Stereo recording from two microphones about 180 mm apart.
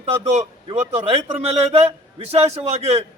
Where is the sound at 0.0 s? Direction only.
35° right (ahead or behind).